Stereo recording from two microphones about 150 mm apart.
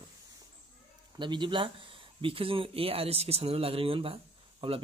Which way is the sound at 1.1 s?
30° right (ahead or behind).